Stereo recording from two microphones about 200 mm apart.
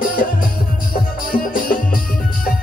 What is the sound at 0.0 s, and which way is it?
Music, 45° left (ahead or behind).